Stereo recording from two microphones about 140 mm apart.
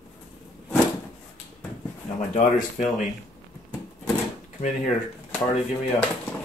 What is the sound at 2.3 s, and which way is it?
Speech, 60° left (ahead or behind).